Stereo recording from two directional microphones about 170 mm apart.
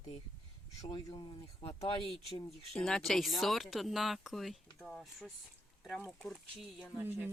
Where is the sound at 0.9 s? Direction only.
25° left (ahead or behind).